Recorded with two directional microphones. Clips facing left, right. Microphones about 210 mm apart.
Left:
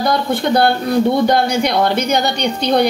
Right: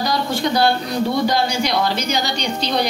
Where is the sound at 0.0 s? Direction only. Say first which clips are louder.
Left 4 dB; 55° left (ahead or behind).